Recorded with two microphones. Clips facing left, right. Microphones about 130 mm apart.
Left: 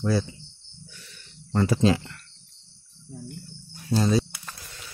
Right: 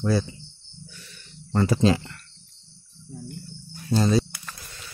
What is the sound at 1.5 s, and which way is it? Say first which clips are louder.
Speech: right 1 dB; 5° left (ahead or behind).